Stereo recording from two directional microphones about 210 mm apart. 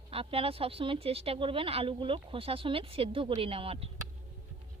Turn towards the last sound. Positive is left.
turn(degrees=-25)  # may be behind; listen again after turning